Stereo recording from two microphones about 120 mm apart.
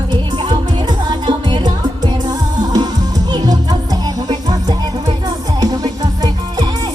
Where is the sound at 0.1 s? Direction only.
40° right (ahead or behind).